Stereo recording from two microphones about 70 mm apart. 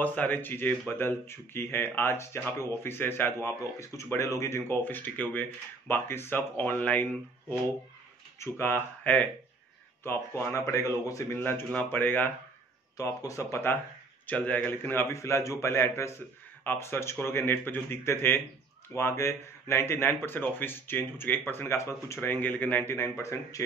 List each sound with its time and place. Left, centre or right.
0.0 s speech: left
8.4 s speech: left
11.3 s speech: left
12.9 s speech: left
14.2 s speech: left
22.9 s speech: left